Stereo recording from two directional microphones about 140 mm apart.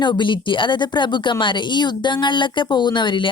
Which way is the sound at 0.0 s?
35° left (ahead or behind).